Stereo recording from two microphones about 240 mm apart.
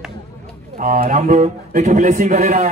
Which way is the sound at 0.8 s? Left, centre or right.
Right.